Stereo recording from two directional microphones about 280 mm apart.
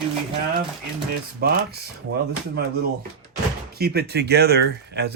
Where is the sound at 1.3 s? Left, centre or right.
Right.